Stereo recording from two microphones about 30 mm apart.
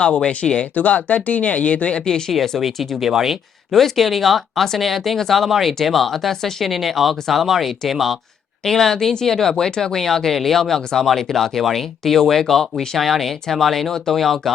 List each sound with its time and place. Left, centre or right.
0.3 s speech: left
0.6 s speech: left
2.6 s speech: centre
3.7 s speech: centre
8.6 s speech: centre